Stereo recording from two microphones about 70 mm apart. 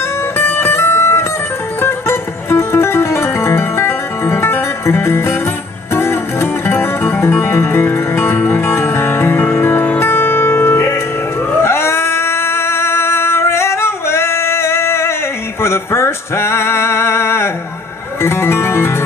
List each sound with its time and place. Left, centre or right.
0.4 s music: left
11.5 s howl: left
15.6 s a sound: left
18.2 s music: left